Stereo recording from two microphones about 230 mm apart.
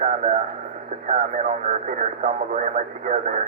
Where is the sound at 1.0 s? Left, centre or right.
Right.